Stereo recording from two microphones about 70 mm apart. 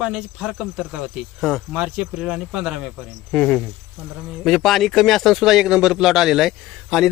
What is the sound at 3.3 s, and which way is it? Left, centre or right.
Speech, centre.